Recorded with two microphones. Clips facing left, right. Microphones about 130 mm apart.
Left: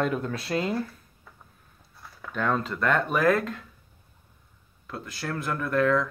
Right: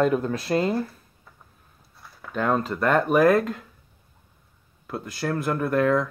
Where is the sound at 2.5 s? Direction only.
35° right (ahead or behind).